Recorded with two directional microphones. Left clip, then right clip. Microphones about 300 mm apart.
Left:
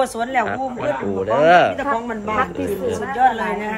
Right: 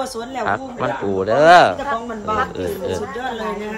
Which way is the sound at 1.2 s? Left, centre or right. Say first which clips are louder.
Right 3 dB; centre.